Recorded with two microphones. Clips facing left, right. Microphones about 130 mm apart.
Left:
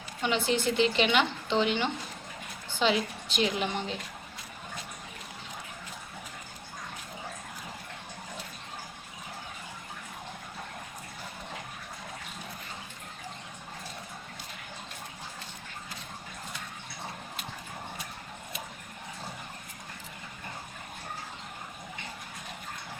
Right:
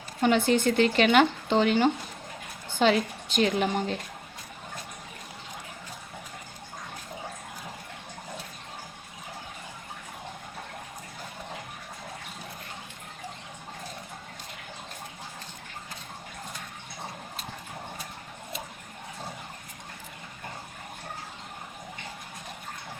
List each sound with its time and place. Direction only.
0.2 s speech: 50° right (ahead or behind)